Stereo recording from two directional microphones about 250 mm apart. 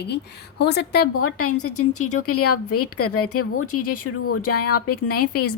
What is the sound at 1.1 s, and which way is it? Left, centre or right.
Speech, left.